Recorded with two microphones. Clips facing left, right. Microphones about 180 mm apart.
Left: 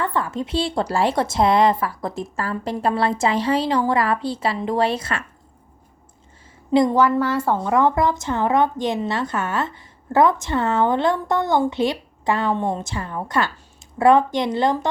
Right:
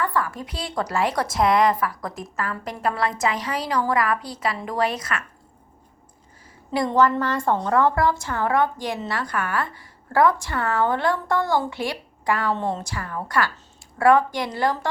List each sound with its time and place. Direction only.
0.0 s a woman's voice: 25° left (ahead or behind)
6.7 s a woman's voice: 15° left (ahead or behind)